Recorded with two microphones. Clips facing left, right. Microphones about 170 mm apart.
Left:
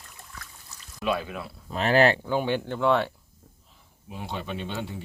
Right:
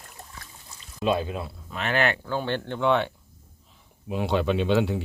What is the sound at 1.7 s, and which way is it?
Speech, 35° left (ahead or behind).